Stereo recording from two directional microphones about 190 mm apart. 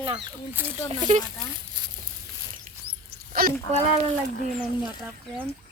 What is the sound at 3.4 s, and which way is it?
Speech, 50° right (ahead or behind).